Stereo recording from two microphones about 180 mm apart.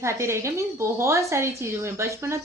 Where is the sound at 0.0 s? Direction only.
15° right (ahead or behind).